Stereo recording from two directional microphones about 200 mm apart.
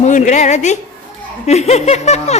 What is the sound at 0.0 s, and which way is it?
A woman's voice, 35° left (ahead or behind).